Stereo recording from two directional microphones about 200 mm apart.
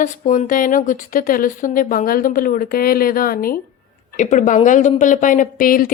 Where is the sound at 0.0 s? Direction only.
40° left (ahead or behind).